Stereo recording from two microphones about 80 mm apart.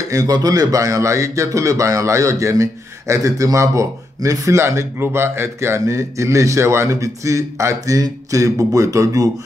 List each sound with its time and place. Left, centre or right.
0.1 s speech: right